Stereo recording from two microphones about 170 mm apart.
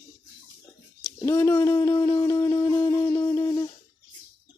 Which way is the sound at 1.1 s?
15° left (ahead or behind).